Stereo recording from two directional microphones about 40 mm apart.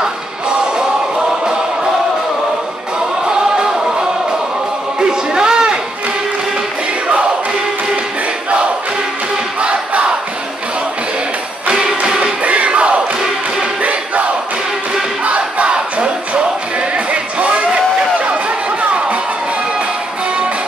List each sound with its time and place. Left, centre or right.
3.3 s music: centre
5.1 s a sound: centre
9.6 s crowd: right
12.0 s music: right
15.2 s music: right